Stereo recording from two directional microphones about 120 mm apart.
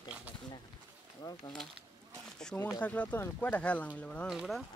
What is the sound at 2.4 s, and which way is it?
Speech, 15° left (ahead or behind).